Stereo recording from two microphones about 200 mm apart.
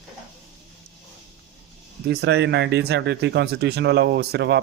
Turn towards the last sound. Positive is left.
turn(degrees=-55)  # may be behind; listen again after turning